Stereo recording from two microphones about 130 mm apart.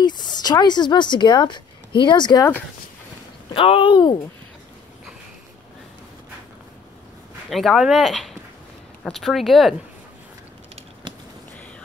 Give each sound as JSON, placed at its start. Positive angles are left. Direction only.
{"t": 0.0, "sound": "a woman's voice", "side_deg": 35}
{"t": 3.5, "sound": "speech", "side_deg": 45}
{"t": 7.4, "sound": "speech", "side_deg": 0}